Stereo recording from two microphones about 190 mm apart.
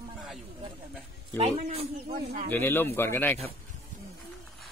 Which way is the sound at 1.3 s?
35° right (ahead or behind).